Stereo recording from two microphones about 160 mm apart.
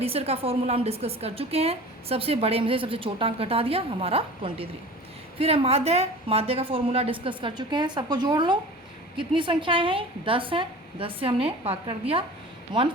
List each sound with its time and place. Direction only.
0.0 s a woman's voice: 40° right (ahead or behind)